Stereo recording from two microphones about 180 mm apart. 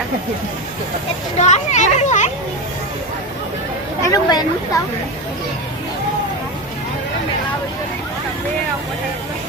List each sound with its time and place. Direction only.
1.4 s a child's voice: 40° left (ahead or behind)
4.0 s speech: 20° left (ahead or behind)